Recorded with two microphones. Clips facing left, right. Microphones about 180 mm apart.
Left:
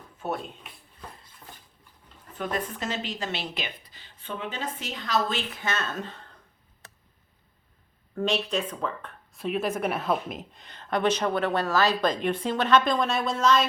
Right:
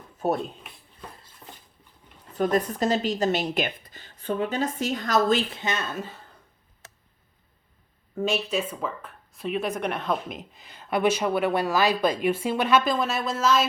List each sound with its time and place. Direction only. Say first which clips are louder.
0.2 s a woman's voice: right 6 dB; 40° right (ahead or behind)
2.3 s a woman's voice: right 7 dB; 40° right (ahead or behind)
5.5 s speech: right 1 dB; 20° right (ahead or behind)
8.1 s speech: right 1 dB; 5° right (ahead or behind)